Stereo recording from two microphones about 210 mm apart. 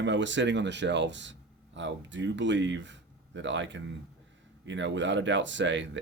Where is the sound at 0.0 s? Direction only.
60° right (ahead or behind).